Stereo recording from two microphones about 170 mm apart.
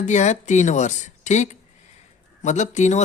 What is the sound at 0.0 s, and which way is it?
Speech, 45° left (ahead or behind).